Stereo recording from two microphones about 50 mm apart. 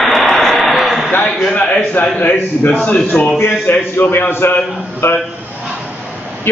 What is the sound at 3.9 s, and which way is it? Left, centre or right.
A man's voice, left.